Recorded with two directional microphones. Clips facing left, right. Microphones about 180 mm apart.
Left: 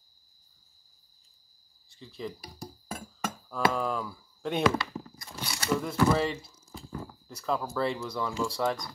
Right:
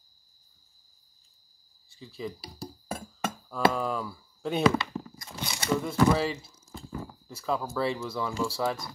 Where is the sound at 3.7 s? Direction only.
Centre (ahead or behind).